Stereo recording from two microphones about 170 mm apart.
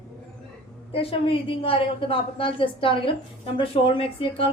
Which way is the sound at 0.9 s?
35° left (ahead or behind).